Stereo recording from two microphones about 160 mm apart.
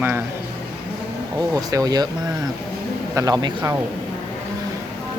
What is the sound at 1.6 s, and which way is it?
Speech, 25° right (ahead or behind).